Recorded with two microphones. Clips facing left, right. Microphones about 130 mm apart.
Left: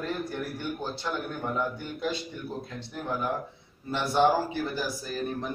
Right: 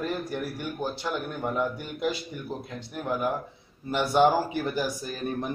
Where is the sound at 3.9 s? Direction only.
15° right (ahead or behind).